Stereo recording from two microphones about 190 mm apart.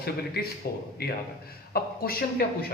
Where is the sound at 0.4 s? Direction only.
55° left (ahead or behind).